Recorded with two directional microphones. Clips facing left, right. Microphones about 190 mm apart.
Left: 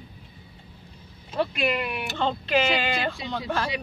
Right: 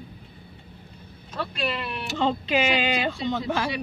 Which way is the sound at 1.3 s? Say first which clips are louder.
Left 4 dB; 15° left (ahead or behind).